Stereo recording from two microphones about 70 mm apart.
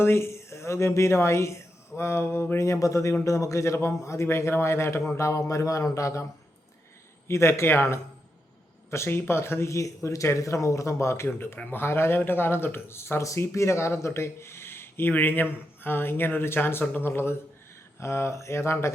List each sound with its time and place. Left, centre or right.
0.0 s speech: left
2.6 s a man's voice: left
7.3 s speech: left